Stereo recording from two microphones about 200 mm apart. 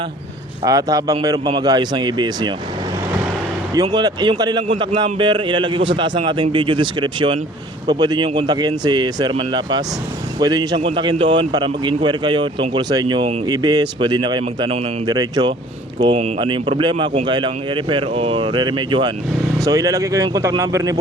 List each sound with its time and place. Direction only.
0.6 s a man's voice: 20° right (ahead or behind)
3.8 s a man's voice: 20° right (ahead or behind)